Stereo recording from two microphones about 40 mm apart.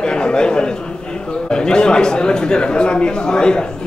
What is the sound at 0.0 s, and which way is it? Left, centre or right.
A man's voice, left.